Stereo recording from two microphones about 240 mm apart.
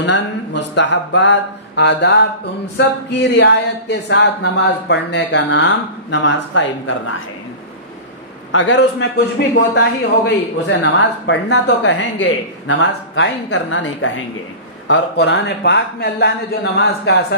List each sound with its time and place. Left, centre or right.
0.0 s speech: left
8.5 s speech: left